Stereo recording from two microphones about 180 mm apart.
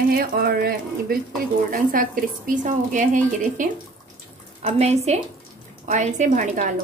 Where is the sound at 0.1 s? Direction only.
55° right (ahead or behind).